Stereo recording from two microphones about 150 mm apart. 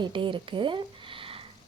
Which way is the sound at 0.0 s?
35° right (ahead or behind).